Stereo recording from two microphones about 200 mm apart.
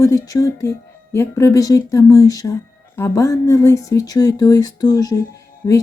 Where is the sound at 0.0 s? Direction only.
15° left (ahead or behind).